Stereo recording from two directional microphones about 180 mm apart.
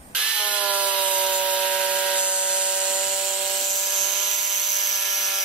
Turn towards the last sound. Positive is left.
turn(degrees=0)  # may be behind; listen again after turning